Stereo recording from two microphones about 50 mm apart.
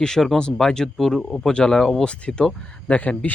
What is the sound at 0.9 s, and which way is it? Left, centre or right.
Speech, centre.